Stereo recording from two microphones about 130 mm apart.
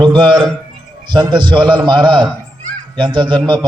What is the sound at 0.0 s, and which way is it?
A man's voice, 40° right (ahead or behind).